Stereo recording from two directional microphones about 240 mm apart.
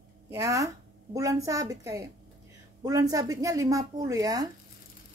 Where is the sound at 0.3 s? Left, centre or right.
Centre.